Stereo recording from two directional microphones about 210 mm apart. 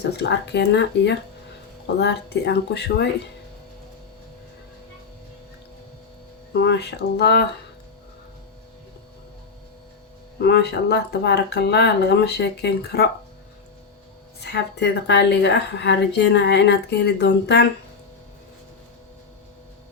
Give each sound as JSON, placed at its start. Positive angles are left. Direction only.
{"t": 0.0, "sound": "a woman's voice", "side_deg": 55}
{"t": 6.5, "sound": "a woman's voice", "side_deg": 50}
{"t": 10.4, "sound": "a woman's voice", "side_deg": 50}
{"t": 14.4, "sound": "a woman's voice", "side_deg": 55}